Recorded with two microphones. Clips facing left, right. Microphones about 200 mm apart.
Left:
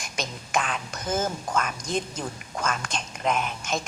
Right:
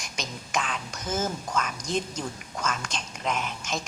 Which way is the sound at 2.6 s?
55° left (ahead or behind).